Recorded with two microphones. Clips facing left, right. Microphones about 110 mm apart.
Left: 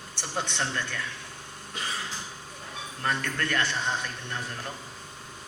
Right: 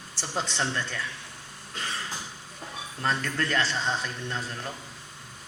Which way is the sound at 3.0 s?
30° right (ahead or behind).